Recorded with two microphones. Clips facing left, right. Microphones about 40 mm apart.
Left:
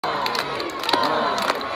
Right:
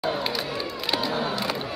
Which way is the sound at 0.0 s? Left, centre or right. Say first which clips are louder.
Left 4 dB; left.